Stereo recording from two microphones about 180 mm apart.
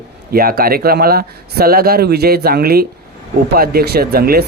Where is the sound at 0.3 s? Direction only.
55° right (ahead or behind).